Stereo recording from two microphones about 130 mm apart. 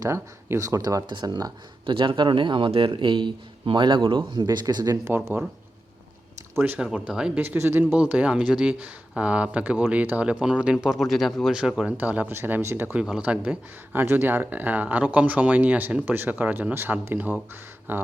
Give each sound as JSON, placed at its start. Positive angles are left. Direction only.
{"t": 0.0, "sound": "speech", "side_deg": -20}
{"t": 5.0, "sound": "speech", "side_deg": -15}
{"t": 6.6, "sound": "speech", "side_deg": -15}